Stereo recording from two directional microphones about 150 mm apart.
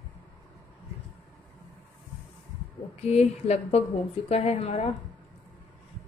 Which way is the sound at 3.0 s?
45° left (ahead or behind).